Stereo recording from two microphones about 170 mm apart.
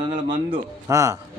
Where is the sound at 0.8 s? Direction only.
20° right (ahead or behind).